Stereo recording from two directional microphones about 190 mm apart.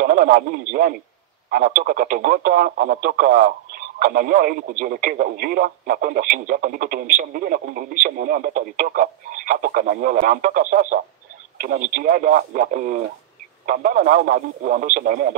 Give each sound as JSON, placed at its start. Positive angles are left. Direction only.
{"t": 0.0, "sound": "speech", "side_deg": -45}